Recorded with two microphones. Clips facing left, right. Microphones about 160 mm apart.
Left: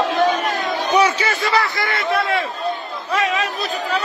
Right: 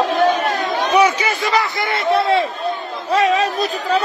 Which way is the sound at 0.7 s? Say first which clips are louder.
Right 1 dB; 80° right.